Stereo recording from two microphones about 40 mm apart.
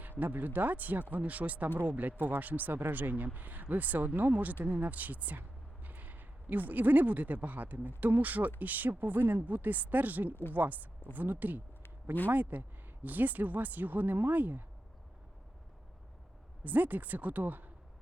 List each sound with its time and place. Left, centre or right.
0.0 s speech: right
16.6 s speech: right